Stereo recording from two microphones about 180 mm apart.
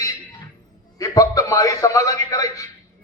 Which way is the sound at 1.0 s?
20° left (ahead or behind).